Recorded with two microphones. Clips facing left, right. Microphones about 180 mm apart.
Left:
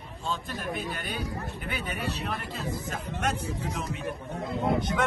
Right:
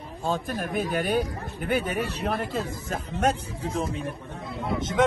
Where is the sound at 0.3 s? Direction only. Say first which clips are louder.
Right 5 dB; 55° right (ahead or behind).